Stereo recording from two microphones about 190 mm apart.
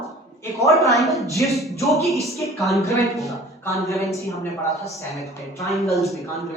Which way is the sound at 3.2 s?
15° left (ahead or behind).